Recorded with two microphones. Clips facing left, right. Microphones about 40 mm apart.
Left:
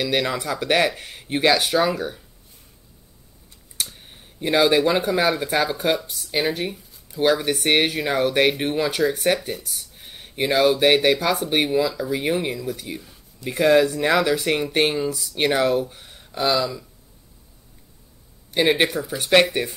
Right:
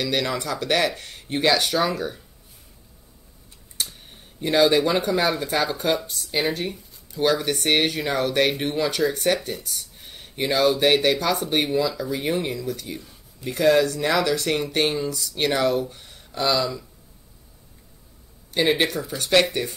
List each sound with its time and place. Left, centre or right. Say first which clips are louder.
0.0 s speech: left 2 dB; centre
4.1 s speech: left 1 dB; centre
18.5 s speech: left 2 dB; centre